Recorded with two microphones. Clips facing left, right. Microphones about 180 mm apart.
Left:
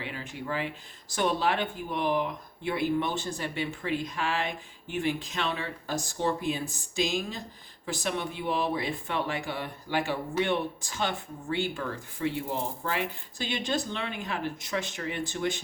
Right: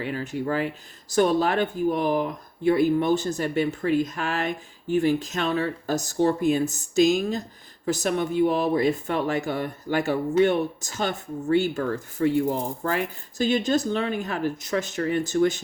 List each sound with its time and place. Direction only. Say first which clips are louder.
0.0 s speech: right 9 dB; 45° right (ahead or behind)